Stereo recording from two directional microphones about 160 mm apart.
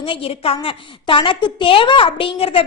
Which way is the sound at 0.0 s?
35° left (ahead or behind).